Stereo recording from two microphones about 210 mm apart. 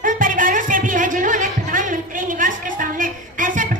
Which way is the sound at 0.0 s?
40° right (ahead or behind).